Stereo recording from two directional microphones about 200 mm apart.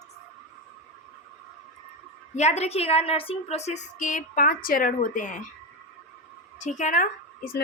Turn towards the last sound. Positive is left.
turn(degrees=45)  # may be behind; listen again after turning